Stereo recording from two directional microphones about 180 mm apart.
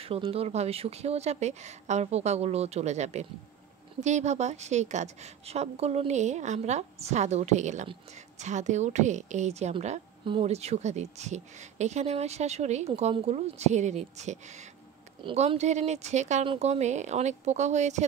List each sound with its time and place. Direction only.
0.0 s a woman's voice: 30° right (ahead or behind)